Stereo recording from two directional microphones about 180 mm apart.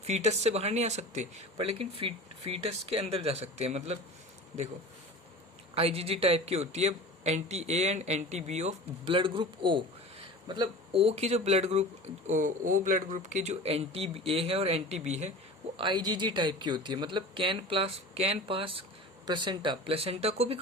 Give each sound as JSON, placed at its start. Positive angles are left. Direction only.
{"t": 0.0, "sound": "speech", "side_deg": -35}
{"t": 5.7, "sound": "speech", "side_deg": -35}
{"t": 15.8, "sound": "speech", "side_deg": -25}